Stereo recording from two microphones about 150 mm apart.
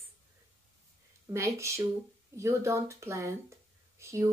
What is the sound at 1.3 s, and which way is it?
Speech, 20° right (ahead or behind).